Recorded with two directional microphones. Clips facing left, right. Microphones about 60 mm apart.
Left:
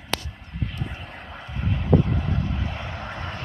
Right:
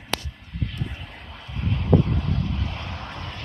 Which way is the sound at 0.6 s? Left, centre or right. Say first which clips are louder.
Even; centre.